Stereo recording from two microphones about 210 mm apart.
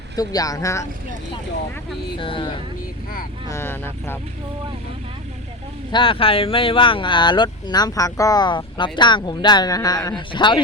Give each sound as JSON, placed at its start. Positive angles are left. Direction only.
{"t": 0.2, "sound": "speech", "side_deg": 15}
{"t": 2.1, "sound": "speech", "side_deg": 25}
{"t": 3.5, "sound": "speech", "side_deg": 10}
{"t": 5.9, "sound": "speech", "side_deg": 25}